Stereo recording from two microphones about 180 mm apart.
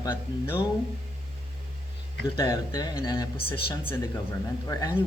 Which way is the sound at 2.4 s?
20° left (ahead or behind).